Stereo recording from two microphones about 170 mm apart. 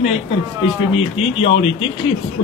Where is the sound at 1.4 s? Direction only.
30° left (ahead or behind).